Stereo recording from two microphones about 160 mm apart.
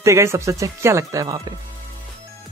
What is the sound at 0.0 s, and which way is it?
Speech, 15° right (ahead or behind).